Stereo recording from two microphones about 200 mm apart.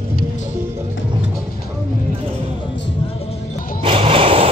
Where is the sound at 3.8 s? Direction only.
25° right (ahead or behind).